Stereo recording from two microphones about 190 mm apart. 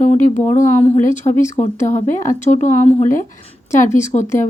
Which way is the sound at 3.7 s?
15° left (ahead or behind).